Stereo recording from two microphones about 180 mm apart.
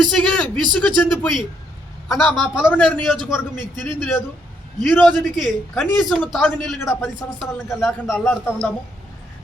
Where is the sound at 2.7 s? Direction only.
10° left (ahead or behind).